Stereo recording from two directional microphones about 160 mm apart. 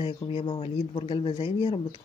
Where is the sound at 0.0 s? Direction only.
35° left (ahead or behind).